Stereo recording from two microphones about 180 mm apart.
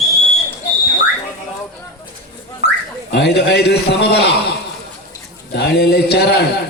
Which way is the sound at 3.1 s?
70° left (ahead or behind).